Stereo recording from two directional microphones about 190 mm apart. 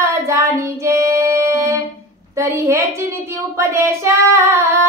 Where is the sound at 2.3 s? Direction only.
15° right (ahead or behind).